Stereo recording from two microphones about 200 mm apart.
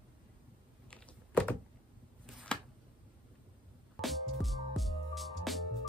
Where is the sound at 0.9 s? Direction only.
5° left (ahead or behind).